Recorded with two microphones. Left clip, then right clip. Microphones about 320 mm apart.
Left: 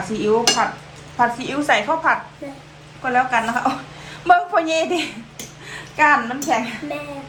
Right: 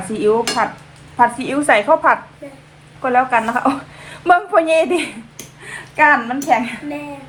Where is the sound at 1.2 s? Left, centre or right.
Right.